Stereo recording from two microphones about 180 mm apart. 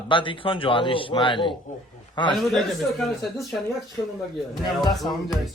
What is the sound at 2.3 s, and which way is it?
A man's voice, centre (ahead or behind).